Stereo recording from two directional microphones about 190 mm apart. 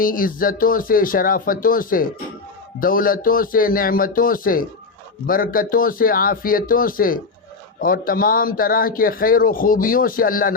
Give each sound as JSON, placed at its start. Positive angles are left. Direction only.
{"t": 0.0, "sound": "a man's voice", "side_deg": 50}